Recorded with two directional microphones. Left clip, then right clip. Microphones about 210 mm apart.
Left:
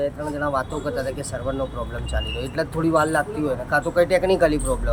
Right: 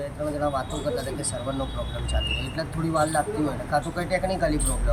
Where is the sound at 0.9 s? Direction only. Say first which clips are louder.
Left 3 dB; 10° left (ahead or behind).